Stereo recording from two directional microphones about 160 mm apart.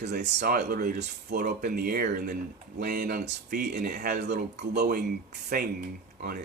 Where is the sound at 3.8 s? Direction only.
70° right (ahead or behind).